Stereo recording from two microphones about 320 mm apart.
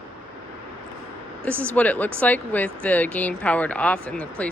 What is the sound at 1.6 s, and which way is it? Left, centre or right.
Speech, centre.